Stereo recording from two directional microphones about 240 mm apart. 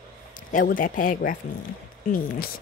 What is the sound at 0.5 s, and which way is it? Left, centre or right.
Speech, left.